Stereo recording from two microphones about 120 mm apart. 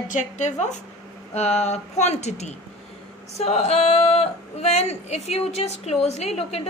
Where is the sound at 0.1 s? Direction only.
80° left.